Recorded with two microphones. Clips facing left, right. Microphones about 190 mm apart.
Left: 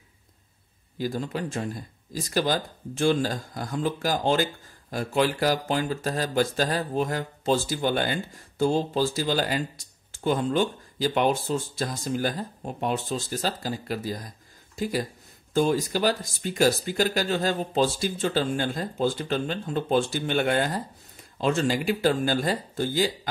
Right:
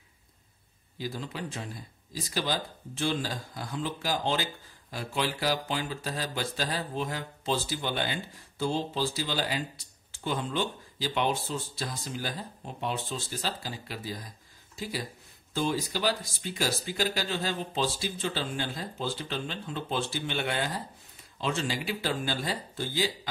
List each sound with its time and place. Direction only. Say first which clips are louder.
0.9 s speech: left 7 dB; 45° left (ahead or behind)